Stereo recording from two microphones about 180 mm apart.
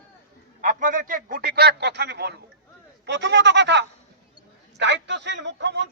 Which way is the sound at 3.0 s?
80° right.